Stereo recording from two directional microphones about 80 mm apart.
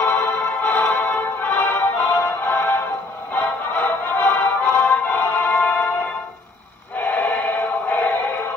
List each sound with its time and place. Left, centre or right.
0.0 s music: centre
7.0 s synthetic singing: centre
7.9 s music: centre